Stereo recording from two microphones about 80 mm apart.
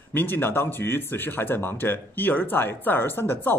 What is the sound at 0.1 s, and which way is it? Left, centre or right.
A man's voice, left.